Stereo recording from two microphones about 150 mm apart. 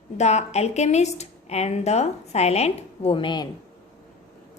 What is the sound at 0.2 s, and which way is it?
A woman's voice, 50° left (ahead or behind).